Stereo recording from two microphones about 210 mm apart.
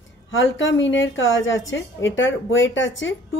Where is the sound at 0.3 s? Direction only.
65° left (ahead or behind).